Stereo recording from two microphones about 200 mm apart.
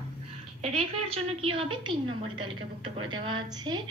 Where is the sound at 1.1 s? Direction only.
30° right (ahead or behind).